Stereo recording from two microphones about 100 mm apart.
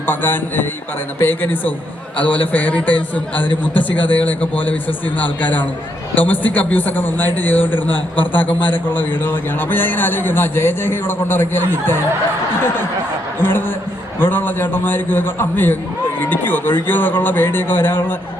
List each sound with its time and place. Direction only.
0.0 s a man's voice: 20° left (ahead or behind)
13.4 s a man's voice: 20° left (ahead or behind)